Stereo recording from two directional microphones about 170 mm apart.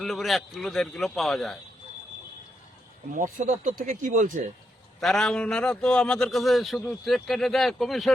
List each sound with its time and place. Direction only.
0.0 s a man's voice: centre (ahead or behind)
3.3 s speech: 50° right (ahead or behind)
4.9 s a man's voice: centre (ahead or behind)